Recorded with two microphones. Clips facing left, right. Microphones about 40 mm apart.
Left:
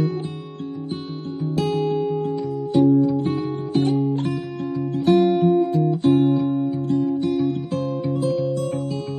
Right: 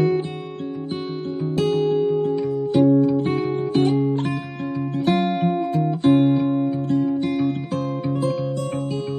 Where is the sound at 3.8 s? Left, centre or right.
Right.